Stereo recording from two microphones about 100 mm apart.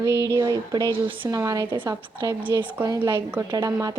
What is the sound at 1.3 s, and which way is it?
Speech, 35° right (ahead or behind).